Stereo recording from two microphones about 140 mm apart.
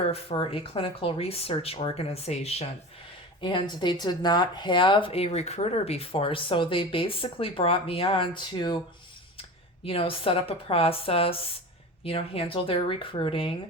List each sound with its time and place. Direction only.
0.1 s speech: 40° left (ahead or behind)
3.4 s a woman's voice: 35° left (ahead or behind)